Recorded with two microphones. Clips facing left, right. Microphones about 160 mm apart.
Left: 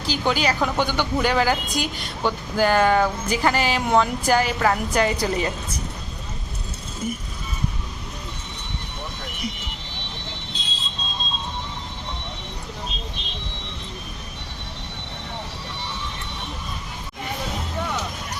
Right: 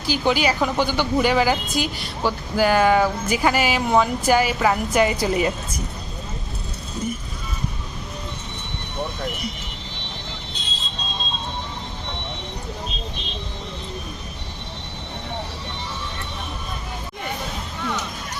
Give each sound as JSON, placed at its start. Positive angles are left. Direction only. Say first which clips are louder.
{"t": 0.0, "sound": "speech", "louder": "right 2 dB", "side_deg": -10}